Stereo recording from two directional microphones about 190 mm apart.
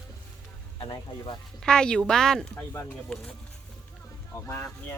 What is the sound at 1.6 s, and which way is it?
A woman's voice, 5° left (ahead or behind).